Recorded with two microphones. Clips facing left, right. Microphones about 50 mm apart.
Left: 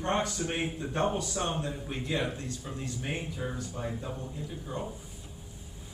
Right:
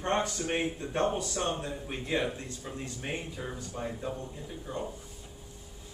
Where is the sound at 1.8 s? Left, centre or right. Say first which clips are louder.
Right 3 dB; right.